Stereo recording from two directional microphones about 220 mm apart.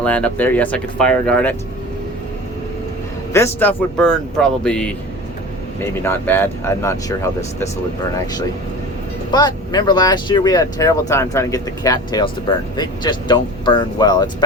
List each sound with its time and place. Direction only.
0.0 s a man's voice: 5° left (ahead or behind)
3.3 s a man's voice: 10° left (ahead or behind)